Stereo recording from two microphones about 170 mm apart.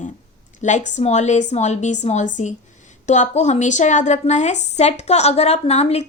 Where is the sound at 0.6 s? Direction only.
45° left (ahead or behind).